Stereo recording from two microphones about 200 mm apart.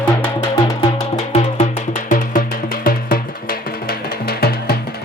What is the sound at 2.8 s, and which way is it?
Music, 45° left (ahead or behind).